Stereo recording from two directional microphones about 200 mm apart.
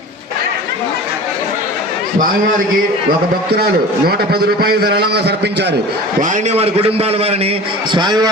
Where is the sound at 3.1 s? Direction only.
50° right (ahead or behind).